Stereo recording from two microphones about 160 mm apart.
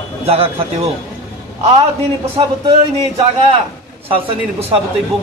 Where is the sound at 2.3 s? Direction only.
35° right (ahead or behind).